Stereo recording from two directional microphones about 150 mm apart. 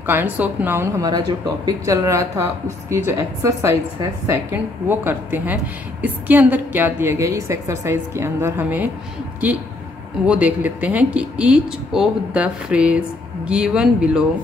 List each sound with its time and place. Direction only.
0.0 s a woman's voice: 15° right (ahead or behind)
1.7 s a woman's voice: 20° right (ahead or behind)
10.2 s a woman's voice: 10° right (ahead or behind)